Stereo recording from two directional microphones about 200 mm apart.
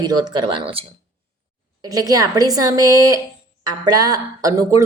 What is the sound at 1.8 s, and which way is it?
Speech, 20° right (ahead or behind).